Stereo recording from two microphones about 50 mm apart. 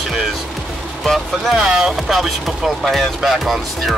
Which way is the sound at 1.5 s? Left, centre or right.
Centre.